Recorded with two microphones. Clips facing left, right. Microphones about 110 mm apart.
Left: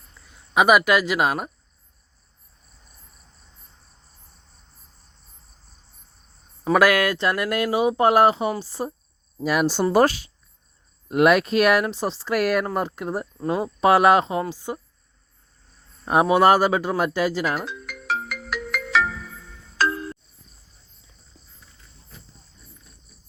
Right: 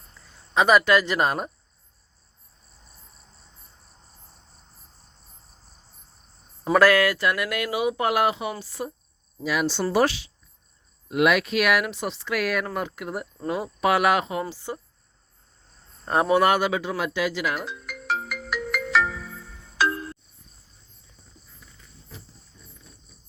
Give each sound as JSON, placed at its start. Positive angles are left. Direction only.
{"t": 0.5, "sound": "speech", "side_deg": 15}
{"t": 6.7, "sound": "speech", "side_deg": 15}
{"t": 7.3, "sound": "speech", "side_deg": 35}
{"t": 9.4, "sound": "speech", "side_deg": 45}
{"t": 14.5, "sound": "speech", "side_deg": 15}
{"t": 16.0, "sound": "speech", "side_deg": 15}
{"t": 16.4, "sound": "speech", "side_deg": 35}
{"t": 17.7, "sound": "ringtone", "side_deg": 0}